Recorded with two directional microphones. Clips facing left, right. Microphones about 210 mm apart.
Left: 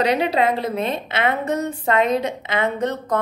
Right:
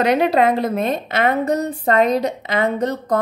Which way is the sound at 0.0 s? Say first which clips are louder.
Right 3 dB; 50° right (ahead or behind).